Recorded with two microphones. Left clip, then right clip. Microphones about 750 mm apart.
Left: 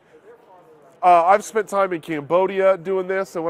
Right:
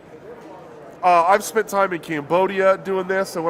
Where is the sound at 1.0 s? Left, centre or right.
Left.